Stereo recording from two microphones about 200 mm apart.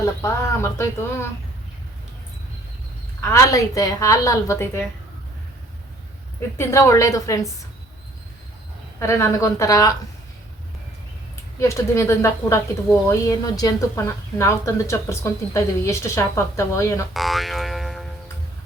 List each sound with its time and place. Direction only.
0.0 s speech: 15° left (ahead or behind)
3.2 s speech: 15° left (ahead or behind)
6.6 s speech: 15° left (ahead or behind)
9.0 s speech: 15° left (ahead or behind)
11.6 s speech: 15° left (ahead or behind)
17.2 s boing: centre (ahead or behind)